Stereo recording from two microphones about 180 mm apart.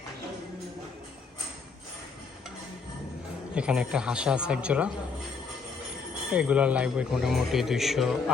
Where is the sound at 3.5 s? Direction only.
5° right (ahead or behind).